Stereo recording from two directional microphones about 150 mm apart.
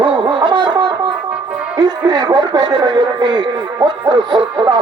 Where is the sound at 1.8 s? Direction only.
25° right (ahead or behind).